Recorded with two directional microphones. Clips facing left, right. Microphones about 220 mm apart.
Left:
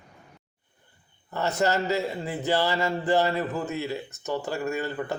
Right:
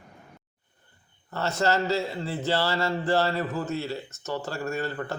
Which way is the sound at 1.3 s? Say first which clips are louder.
Left 1 dB; 15° left (ahead or behind).